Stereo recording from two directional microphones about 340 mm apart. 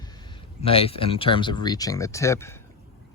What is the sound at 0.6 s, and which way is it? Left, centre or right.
Speech, centre.